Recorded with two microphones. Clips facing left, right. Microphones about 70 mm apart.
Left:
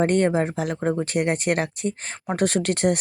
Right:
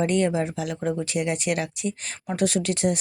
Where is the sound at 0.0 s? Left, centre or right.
Left.